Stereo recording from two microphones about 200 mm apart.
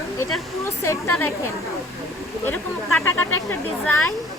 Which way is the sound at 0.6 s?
15° left (ahead or behind).